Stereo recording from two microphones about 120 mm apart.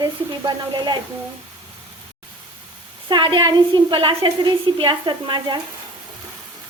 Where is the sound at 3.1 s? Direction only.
40° right (ahead or behind).